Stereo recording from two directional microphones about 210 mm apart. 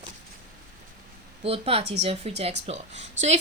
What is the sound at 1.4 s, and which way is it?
A woman's voice, 25° right (ahead or behind).